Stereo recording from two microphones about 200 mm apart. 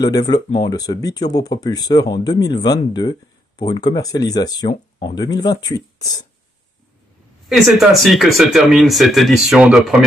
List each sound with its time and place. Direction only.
0.0 s speech: 20° left (ahead or behind)
7.4 s speech: centre (ahead or behind)